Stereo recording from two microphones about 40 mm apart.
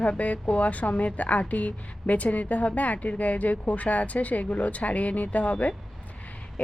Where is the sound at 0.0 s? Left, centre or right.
Left.